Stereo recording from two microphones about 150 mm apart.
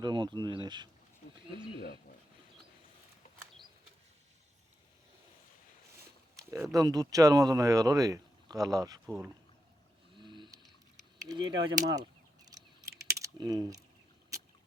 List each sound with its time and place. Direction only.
0.0 s speech: 30° right (ahead or behind)
6.5 s speech: 20° right (ahead or behind)
10.2 s a sound: 30° right (ahead or behind)